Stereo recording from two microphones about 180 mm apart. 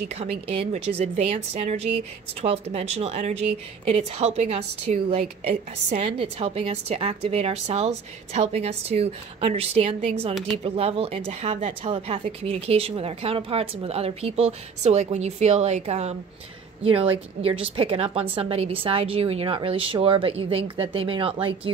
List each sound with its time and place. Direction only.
0.1 s a woman's voice: 35° right (ahead or behind)